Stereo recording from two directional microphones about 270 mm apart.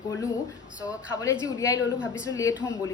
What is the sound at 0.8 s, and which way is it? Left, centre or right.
A woman's voice, centre.